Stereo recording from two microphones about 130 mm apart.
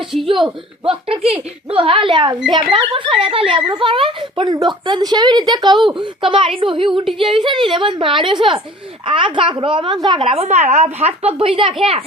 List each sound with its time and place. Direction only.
0.9 s a woman's voice: 45° right (ahead or behind)
10.2 s a woman's voice: 55° right (ahead or behind)